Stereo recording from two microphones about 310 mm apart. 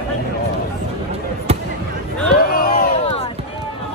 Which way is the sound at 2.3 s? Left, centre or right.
Left.